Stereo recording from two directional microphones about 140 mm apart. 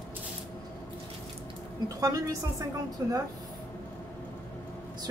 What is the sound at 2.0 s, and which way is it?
Speech, 25° right (ahead or behind).